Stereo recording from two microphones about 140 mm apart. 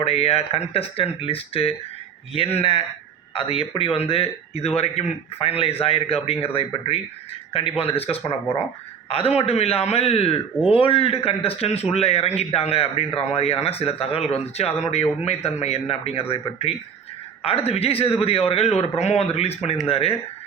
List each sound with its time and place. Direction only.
0.0 s speech: 45° left (ahead or behind)